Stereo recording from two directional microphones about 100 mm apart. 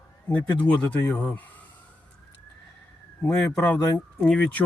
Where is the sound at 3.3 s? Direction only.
15° left (ahead or behind).